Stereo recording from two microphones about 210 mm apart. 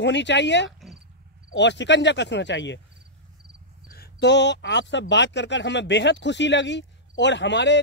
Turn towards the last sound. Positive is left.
turn(degrees=55)  # may be behind; listen again after turning